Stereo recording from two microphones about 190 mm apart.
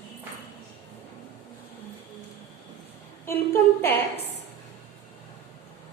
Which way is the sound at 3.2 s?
10° left (ahead or behind).